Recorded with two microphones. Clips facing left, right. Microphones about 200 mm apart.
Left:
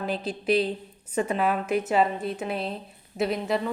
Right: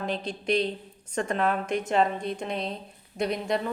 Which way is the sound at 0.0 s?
5° left (ahead or behind).